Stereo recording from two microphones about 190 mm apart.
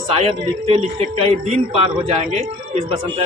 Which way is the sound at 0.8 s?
35° right (ahead or behind).